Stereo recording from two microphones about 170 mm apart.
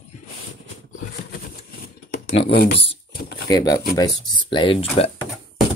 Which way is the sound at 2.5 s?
65° left (ahead or behind).